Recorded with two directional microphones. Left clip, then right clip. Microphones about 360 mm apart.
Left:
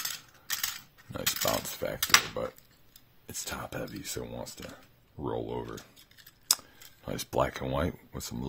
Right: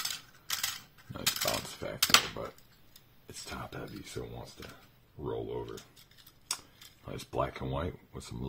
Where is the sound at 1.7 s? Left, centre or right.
Left.